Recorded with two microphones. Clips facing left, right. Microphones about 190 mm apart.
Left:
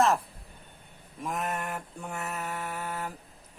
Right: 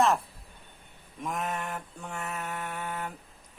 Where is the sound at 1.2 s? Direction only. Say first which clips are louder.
Even; centre (ahead or behind).